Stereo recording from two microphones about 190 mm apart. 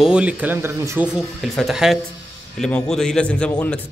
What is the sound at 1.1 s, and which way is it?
A man's voice, centre (ahead or behind).